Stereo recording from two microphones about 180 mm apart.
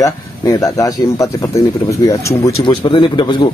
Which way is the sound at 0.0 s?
20° left (ahead or behind).